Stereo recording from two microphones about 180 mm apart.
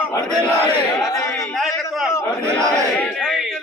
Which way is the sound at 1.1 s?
20° left (ahead or behind).